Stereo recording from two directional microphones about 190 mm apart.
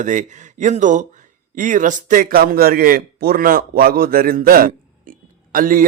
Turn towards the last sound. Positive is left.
turn(degrees=-45)  # may be behind; listen again after turning